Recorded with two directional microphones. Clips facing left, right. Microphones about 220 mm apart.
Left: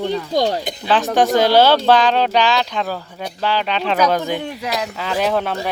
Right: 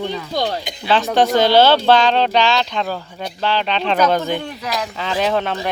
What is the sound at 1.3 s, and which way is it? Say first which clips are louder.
Speech: even; 10° left (ahead or behind).